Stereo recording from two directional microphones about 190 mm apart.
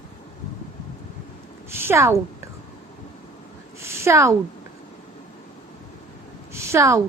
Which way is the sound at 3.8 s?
15° right (ahead or behind).